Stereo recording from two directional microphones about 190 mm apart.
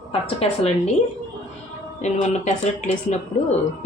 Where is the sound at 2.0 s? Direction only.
40° left (ahead or behind).